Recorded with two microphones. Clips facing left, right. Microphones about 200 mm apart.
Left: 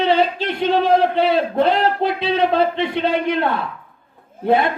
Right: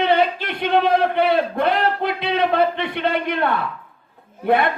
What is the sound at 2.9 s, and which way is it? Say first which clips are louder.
Speech: left 3 dB; 60° right (ahead or behind).